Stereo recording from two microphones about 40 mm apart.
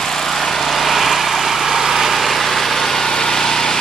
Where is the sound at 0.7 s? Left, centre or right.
Centre.